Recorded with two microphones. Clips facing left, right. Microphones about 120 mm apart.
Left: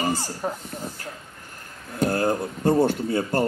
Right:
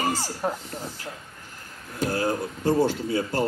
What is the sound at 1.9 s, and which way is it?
Speech, 50° left (ahead or behind).